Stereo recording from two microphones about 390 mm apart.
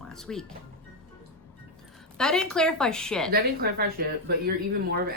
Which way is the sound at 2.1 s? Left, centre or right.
Centre.